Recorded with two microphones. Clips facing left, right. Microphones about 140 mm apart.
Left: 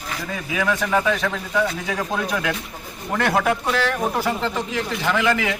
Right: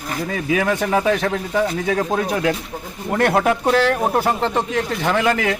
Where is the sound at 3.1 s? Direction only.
50° right (ahead or behind).